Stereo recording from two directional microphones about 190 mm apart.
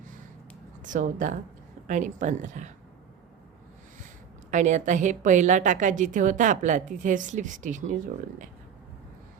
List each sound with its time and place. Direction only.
0.9 s a woman's voice: 45° right (ahead or behind)
4.5 s a woman's voice: 40° right (ahead or behind)